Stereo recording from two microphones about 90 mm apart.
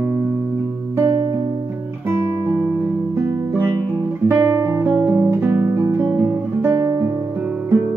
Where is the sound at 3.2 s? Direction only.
30° right (ahead or behind).